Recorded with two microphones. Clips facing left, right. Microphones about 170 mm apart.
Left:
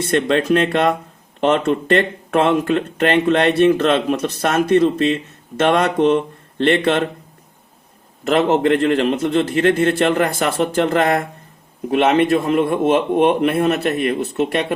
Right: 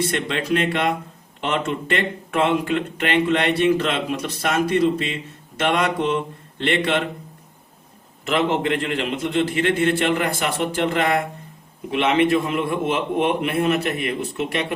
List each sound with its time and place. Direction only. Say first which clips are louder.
0.0 s speech: left 7 dB; 50° left (ahead or behind)
8.3 s speech: left 6 dB; 45° left (ahead or behind)